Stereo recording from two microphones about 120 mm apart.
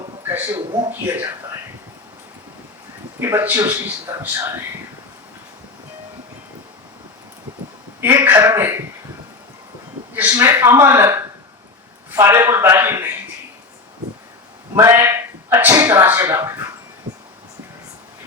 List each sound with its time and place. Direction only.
0.3 s a man's voice: 20° right (ahead or behind)
3.2 s a man's voice: 20° right (ahead or behind)
8.0 s a man's voice: 20° right (ahead or behind)
10.3 s a man's voice: 25° right (ahead or behind)
14.8 s speech: 20° right (ahead or behind)